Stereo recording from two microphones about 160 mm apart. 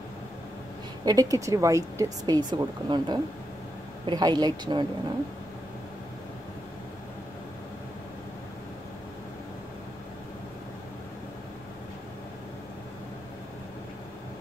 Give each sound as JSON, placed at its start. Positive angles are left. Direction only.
{"t": 1.0, "sound": "speech", "side_deg": -20}